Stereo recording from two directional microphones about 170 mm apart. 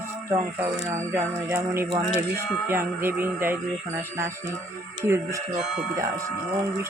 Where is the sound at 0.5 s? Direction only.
15° right (ahead or behind).